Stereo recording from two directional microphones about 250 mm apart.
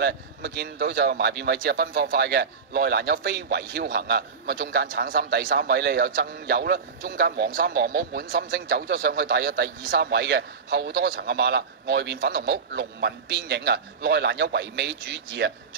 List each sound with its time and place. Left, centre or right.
0.0 s a man's voice: right